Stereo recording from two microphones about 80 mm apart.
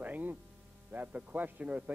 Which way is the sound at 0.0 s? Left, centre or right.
Right.